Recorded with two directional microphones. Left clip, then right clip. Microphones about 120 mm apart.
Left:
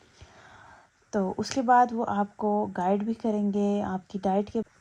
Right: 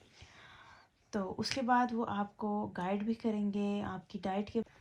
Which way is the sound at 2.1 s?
90° left.